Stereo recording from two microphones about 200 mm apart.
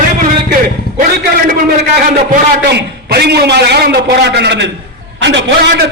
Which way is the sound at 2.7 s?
55° right (ahead or behind).